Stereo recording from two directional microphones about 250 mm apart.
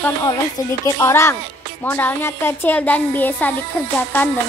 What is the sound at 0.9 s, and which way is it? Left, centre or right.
Speech, centre.